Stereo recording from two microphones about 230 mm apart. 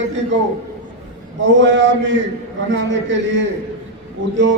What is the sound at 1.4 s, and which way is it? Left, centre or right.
A man's voice, right.